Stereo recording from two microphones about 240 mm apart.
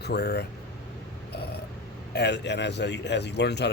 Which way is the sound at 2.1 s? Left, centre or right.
Left.